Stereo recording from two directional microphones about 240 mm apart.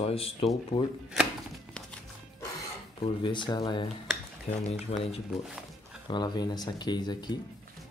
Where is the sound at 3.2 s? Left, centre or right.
Left.